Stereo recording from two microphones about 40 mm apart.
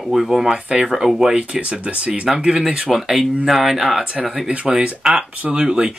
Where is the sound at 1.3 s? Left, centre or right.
Right.